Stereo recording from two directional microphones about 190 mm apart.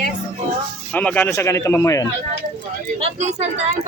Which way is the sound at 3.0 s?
35° right (ahead or behind).